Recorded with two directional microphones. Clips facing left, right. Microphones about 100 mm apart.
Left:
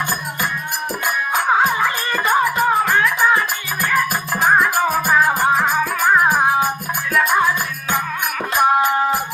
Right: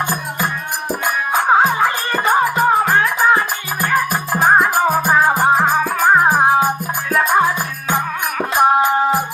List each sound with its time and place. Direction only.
1.3 s music: 30° right (ahead or behind)